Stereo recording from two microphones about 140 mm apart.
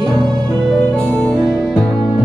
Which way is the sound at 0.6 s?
5° left (ahead or behind).